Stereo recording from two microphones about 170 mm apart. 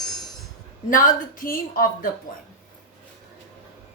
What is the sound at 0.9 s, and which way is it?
Speech, 50° left (ahead or behind).